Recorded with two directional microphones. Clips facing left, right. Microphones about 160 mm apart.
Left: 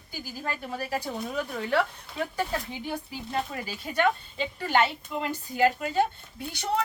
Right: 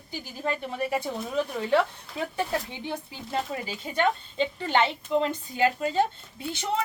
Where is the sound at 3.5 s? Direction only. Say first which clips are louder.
Right 1 dB; 25° right (ahead or behind).